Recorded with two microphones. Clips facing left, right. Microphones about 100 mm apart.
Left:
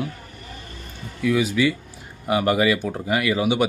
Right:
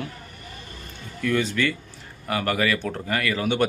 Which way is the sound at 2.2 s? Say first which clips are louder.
Left 5 dB; 20° left (ahead or behind).